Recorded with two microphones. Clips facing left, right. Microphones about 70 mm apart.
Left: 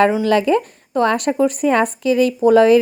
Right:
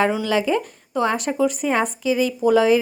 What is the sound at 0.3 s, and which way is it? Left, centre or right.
Speech, left.